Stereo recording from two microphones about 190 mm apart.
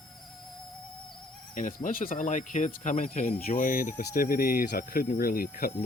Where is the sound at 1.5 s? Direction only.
45° left (ahead or behind).